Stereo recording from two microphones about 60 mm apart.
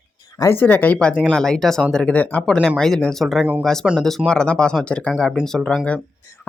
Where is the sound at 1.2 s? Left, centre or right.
Centre.